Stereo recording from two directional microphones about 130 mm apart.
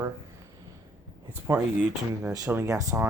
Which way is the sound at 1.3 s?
15° right (ahead or behind).